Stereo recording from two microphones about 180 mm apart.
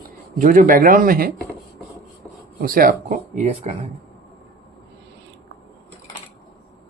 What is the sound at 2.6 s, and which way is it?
Speech, 50° right (ahead or behind).